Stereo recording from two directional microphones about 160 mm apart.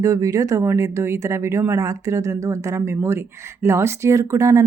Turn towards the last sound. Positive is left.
turn(degrees=-20)  # may be behind; listen again after turning